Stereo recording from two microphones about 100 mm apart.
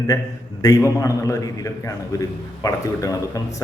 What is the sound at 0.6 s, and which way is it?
A man's voice, 35° left (ahead or behind).